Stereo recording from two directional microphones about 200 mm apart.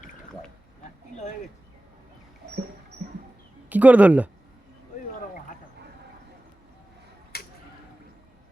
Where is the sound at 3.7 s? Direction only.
5° right (ahead or behind).